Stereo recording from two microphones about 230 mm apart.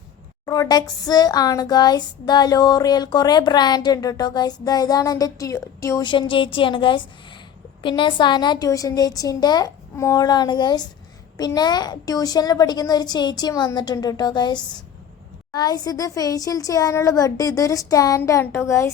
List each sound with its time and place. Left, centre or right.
0.4 s speech: centre